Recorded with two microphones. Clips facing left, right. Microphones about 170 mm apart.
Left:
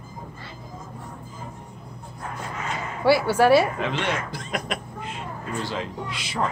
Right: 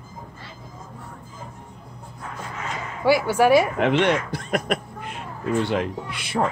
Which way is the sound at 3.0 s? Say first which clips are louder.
Even; 10° right (ahead or behind).